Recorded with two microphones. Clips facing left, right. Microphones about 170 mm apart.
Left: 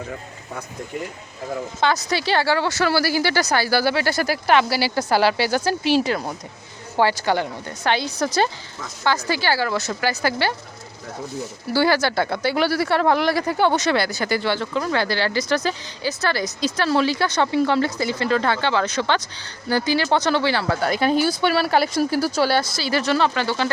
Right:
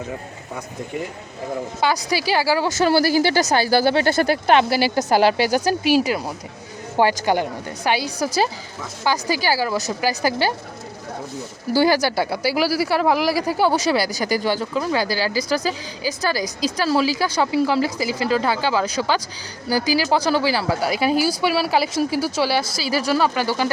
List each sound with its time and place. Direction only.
1.8 s speech: 10° right (ahead or behind)
11.7 s speech: 15° right (ahead or behind)